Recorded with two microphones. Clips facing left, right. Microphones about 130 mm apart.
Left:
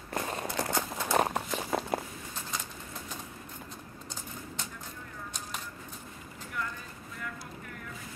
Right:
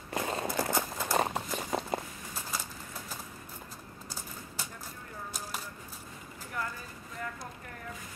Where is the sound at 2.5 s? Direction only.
5° right (ahead or behind).